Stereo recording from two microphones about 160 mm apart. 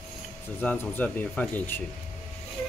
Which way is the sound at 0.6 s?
10° left (ahead or behind).